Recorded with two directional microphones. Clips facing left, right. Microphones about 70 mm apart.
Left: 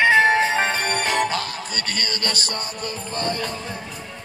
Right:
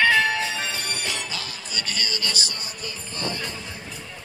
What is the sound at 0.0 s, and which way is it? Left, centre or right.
Music, left.